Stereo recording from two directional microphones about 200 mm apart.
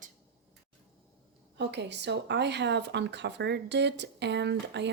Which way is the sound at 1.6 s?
60° right (ahead or behind).